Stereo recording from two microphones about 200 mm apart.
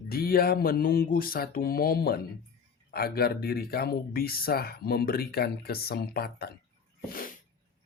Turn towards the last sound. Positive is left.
turn(degrees=45)  # may be behind; listen again after turning